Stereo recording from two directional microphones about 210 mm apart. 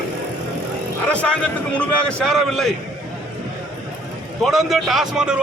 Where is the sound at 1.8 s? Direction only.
5° left (ahead or behind).